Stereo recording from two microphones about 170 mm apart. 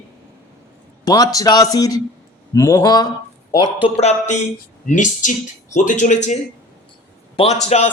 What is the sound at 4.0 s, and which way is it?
A man's voice, 40° left (ahead or behind).